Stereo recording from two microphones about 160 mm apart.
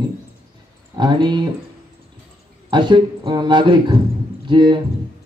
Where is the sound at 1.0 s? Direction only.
30° right (ahead or behind).